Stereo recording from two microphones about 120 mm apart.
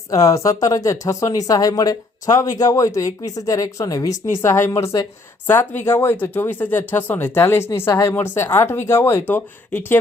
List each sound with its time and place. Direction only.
0.1 s speech: 25° left (ahead or behind)